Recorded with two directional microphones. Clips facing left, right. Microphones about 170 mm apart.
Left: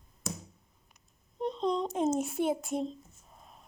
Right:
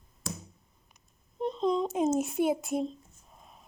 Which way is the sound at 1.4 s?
5° right (ahead or behind).